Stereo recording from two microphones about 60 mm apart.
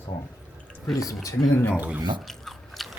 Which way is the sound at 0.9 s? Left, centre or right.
Left.